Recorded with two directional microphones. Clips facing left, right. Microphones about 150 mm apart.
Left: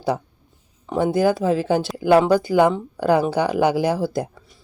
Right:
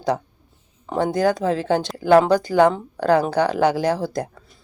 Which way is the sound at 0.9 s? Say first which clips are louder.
Left 1 dB; 10° left (ahead or behind).